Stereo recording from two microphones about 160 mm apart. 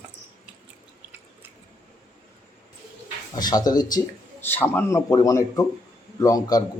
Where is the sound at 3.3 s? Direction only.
25° left (ahead or behind).